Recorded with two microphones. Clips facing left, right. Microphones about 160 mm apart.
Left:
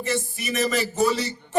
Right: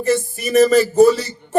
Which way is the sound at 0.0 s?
40° right (ahead or behind).